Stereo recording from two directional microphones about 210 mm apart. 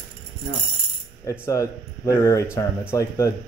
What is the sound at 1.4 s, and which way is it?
Speech, 15° left (ahead or behind).